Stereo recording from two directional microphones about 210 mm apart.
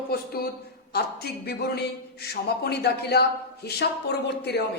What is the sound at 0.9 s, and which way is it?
Speech, 50° left (ahead or behind).